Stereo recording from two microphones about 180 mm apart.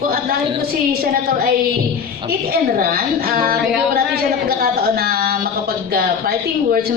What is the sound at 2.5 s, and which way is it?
A woman's voice, 55° right (ahead or behind).